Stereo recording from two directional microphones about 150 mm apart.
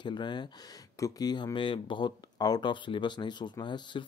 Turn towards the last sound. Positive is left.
turn(degrees=30)  # may be behind; listen again after turning